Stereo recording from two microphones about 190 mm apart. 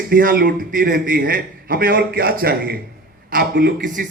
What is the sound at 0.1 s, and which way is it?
A man's voice, 50° right (ahead or behind).